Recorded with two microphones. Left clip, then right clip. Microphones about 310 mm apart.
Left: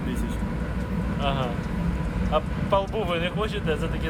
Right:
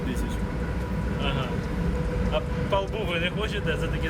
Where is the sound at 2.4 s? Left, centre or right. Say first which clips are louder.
Left 4 dB; centre.